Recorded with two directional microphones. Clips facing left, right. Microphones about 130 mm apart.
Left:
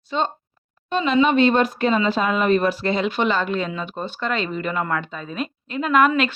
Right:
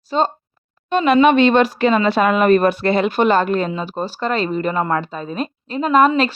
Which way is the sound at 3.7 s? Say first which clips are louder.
Right 5 dB; 35° right (ahead or behind).